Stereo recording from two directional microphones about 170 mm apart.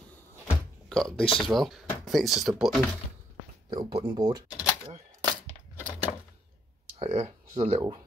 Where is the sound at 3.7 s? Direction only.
30° right (ahead or behind).